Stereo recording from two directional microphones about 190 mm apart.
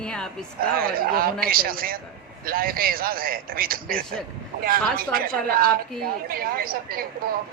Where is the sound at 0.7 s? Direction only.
50° right (ahead or behind).